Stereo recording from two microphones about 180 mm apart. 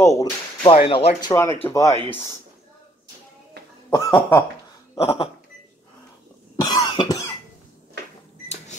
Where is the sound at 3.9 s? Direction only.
15° left (ahead or behind).